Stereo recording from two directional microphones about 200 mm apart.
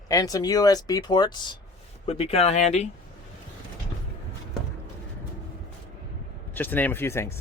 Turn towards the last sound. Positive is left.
turn(degrees=10)  # may be behind; listen again after turning